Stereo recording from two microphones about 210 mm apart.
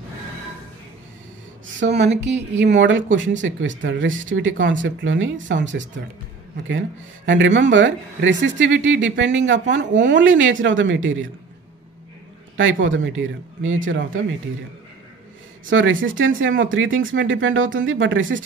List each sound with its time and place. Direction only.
1.8 s speech: 60° right (ahead or behind)
7.2 s speech: 60° right (ahead or behind)
12.5 s speech: 65° right (ahead or behind)
15.7 s speech: 70° right (ahead or behind)